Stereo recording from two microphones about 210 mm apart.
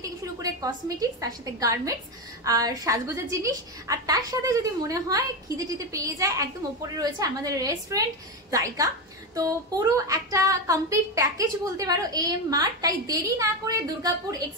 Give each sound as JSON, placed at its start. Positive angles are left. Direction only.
{"t": 0.0, "sound": "a woman's voice", "side_deg": -15}